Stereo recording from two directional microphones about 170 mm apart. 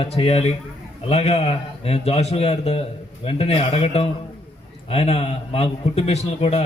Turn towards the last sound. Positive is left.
turn(degrees=35)  # may be behind; listen again after turning